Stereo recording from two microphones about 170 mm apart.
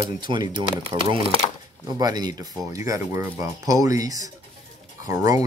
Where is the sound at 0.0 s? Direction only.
25° right (ahead or behind).